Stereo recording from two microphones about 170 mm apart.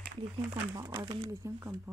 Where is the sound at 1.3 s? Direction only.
15° right (ahead or behind).